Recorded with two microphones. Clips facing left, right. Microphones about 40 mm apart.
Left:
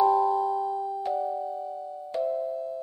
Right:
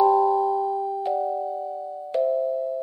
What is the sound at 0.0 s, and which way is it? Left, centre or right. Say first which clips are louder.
Music: right 4 dB; centre.